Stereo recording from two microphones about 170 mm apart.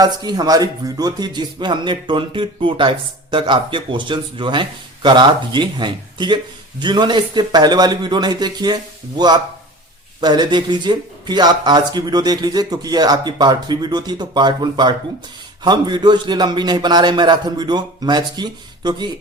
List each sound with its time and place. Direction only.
0.0 s speech: 25° right (ahead or behind)